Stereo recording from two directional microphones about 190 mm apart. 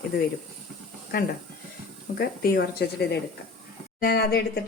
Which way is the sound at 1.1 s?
50° left (ahead or behind).